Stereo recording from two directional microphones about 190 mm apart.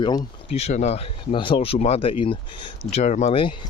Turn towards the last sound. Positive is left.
turn(degrees=30)  # may be behind; listen again after turning